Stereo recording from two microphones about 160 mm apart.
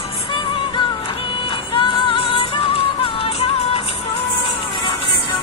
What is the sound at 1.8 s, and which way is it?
Music, 35° left (ahead or behind).